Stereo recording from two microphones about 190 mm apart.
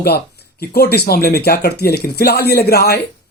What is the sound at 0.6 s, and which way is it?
Speech, 55° left (ahead or behind).